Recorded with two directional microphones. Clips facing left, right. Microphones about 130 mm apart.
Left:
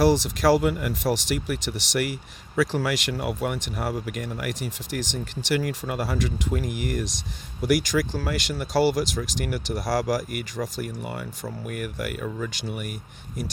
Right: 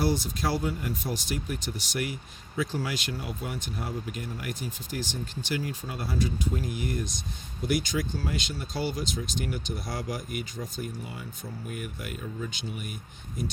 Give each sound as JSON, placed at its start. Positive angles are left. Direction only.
{"t": 0.0, "sound": "speech", "side_deg": 90}
{"t": 4.9, "sound": "speech", "side_deg": 90}